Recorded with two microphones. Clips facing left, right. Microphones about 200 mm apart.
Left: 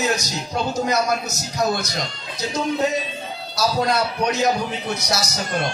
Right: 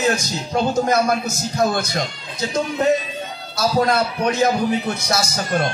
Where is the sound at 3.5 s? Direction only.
50° right (ahead or behind).